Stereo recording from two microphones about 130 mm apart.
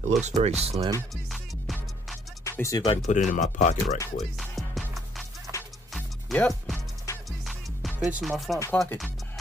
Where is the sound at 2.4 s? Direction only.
25° left (ahead or behind).